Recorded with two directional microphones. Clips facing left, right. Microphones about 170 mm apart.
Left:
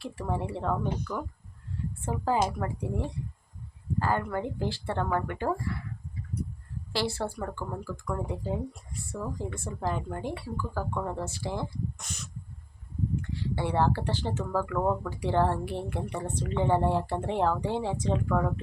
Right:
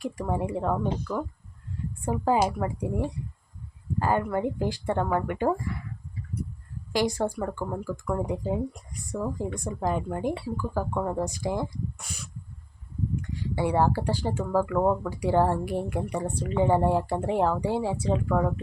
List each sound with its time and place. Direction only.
0.0 s speech: 15° right (ahead or behind)
0.8 s speech: 30° right (ahead or behind)
2.0 s speech: 15° right (ahead or behind)
6.9 s speech: 15° right (ahead or behind)
13.6 s speech: 10° right (ahead or behind)